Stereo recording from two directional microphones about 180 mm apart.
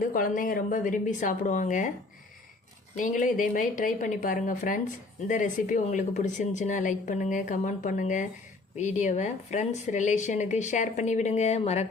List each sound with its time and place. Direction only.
0.0 s a woman's voice: 50° left (ahead or behind)
3.0 s a woman's voice: 45° left (ahead or behind)